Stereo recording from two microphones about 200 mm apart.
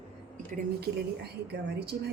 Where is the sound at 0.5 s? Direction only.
55° right (ahead or behind).